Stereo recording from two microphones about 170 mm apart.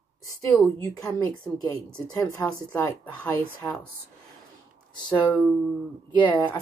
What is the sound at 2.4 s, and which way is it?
A woman's voice, 10° left (ahead or behind).